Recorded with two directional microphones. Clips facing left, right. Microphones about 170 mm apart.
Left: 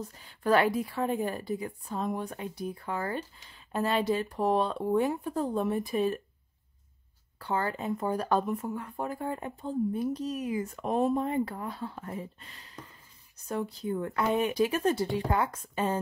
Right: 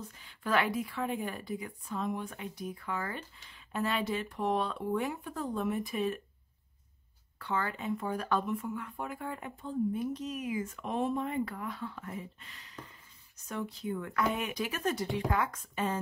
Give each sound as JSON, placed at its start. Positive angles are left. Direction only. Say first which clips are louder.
{"t": 0.0, "sound": "a woman's voice", "louder": "left 7 dB", "side_deg": 40}
{"t": 7.3, "sound": "a woman's voice", "louder": "left 4 dB", "side_deg": 35}